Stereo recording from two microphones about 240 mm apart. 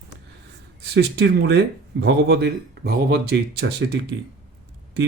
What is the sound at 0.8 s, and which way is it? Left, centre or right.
Speech, right.